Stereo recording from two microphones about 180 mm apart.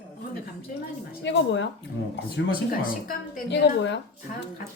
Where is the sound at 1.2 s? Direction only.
85° left.